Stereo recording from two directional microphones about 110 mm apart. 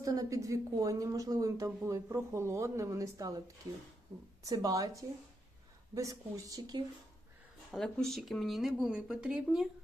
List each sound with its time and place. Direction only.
0.0 s speech: 30° right (ahead or behind)
4.4 s speech: 35° right (ahead or behind)
7.7 s speech: 5° left (ahead or behind)